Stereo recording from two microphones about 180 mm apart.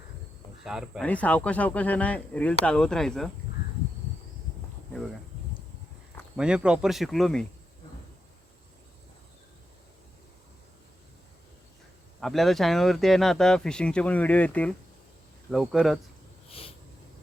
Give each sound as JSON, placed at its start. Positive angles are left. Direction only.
{"t": 0.6, "sound": "speech", "side_deg": -5}
{"t": 1.0, "sound": "speech", "side_deg": 10}
{"t": 6.3, "sound": "speech", "side_deg": -5}
{"t": 12.2, "sound": "speech", "side_deg": 0}
{"t": 16.5, "sound": "a sound", "side_deg": 30}